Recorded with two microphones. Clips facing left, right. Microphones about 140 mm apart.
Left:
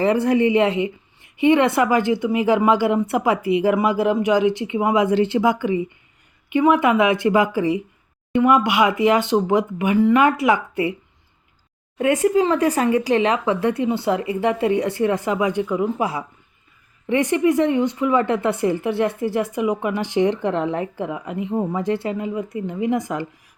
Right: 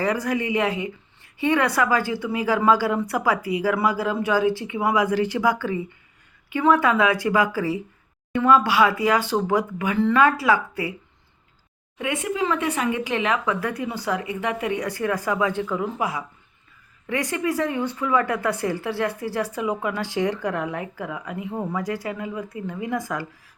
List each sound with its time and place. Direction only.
0.0 s speech: 25° left (ahead or behind)
11.9 s speech: 40° left (ahead or behind); by 23.2 s 20° left (ahead or behind)